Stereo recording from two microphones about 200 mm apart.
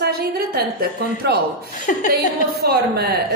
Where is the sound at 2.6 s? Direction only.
55° right (ahead or behind).